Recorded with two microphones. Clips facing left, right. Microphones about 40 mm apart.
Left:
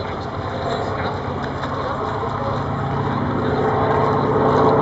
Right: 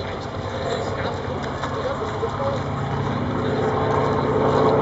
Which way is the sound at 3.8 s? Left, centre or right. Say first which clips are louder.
Left 3 dB; centre.